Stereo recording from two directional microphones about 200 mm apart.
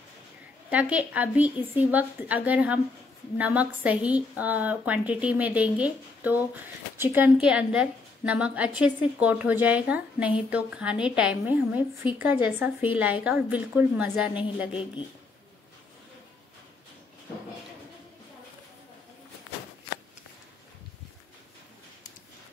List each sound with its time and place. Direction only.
0.7 s a woman's voice: 5° right (ahead or behind)
14.7 s speech: 25° left (ahead or behind)